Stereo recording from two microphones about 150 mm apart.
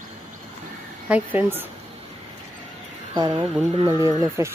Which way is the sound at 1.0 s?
10° right (ahead or behind).